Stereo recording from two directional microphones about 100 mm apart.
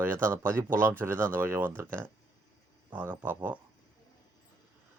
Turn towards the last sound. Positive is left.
turn(degrees=-15)  # may be behind; listen again after turning